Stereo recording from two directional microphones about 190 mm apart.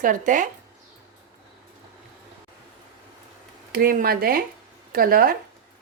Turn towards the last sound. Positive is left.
turn(degrees=-50)  # may be behind; listen again after turning